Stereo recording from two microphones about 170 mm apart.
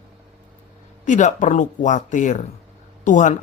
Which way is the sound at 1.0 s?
45° left (ahead or behind).